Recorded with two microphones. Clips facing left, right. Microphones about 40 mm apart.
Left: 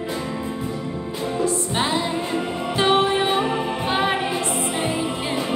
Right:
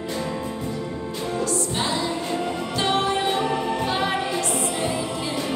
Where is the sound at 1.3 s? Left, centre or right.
Left.